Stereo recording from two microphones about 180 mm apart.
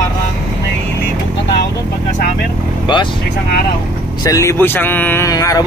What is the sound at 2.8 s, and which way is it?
Speech, 25° left (ahead or behind).